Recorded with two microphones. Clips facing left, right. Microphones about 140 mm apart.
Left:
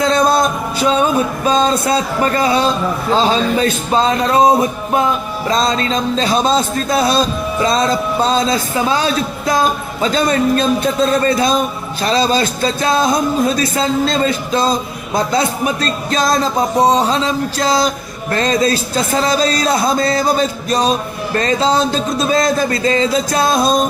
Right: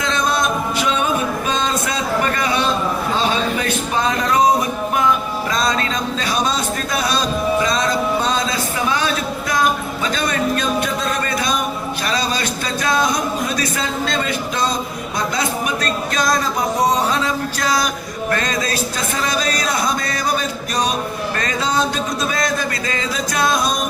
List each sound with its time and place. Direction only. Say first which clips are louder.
0.0 s music: left 6 dB; 35° left (ahead or behind)
1.5 s a sound: left 7 dB; 35° left (ahead or behind)
3.2 s speech: left 8 dB; 30° left (ahead or behind)